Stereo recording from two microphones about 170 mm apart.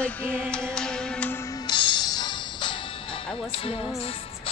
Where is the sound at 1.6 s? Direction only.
25° left (ahead or behind).